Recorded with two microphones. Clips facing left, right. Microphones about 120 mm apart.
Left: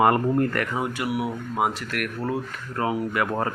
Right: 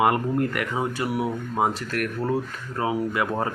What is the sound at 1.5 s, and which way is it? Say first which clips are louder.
Speech: right 1 dB; 35° right (ahead or behind).